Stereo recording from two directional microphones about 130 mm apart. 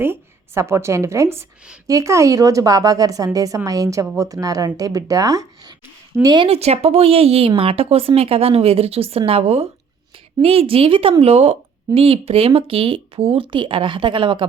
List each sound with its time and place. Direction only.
0.0 s a woman's voice: 20° right (ahead or behind); by 6.5 s 35° right (ahead or behind)
6.5 s speech: 50° right (ahead or behind)